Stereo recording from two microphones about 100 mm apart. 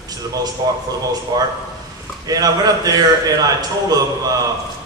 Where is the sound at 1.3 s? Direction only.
40° right (ahead or behind).